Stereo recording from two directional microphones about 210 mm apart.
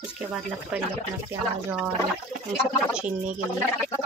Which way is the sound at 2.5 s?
5° right (ahead or behind).